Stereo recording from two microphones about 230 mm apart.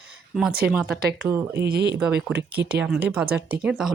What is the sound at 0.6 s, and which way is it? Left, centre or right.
Speech, centre.